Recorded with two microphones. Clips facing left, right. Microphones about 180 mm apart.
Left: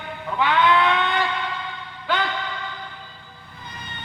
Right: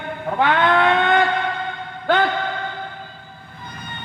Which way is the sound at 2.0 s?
50° right (ahead or behind).